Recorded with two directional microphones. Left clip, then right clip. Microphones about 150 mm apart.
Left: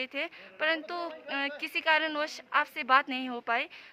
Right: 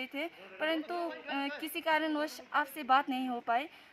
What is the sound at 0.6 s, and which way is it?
A woman's voice, 15° left (ahead or behind).